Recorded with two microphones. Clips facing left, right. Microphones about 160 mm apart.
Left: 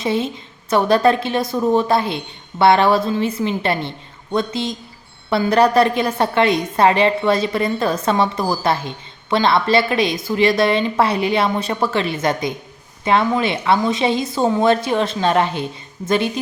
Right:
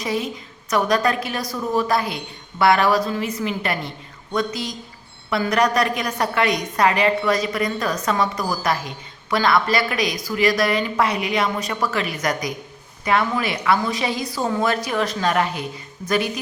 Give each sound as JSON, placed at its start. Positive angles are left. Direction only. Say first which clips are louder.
{"t": 0.0, "sound": "a woman's voice", "louder": "left 4 dB", "side_deg": 25}